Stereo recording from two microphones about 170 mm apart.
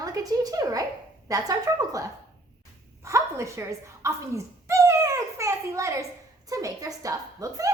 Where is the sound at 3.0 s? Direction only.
15° right (ahead or behind).